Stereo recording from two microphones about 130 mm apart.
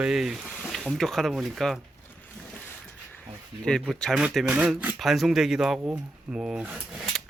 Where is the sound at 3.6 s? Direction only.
5° left (ahead or behind); by 4.9 s 10° right (ahead or behind).